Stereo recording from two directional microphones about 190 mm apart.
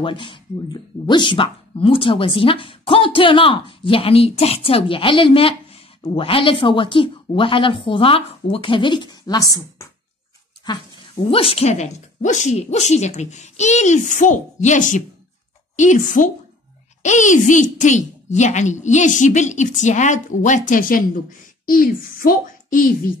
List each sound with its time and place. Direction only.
0.0 s a woman's voice: 25° left (ahead or behind); by 22.9 s 45° left (ahead or behind)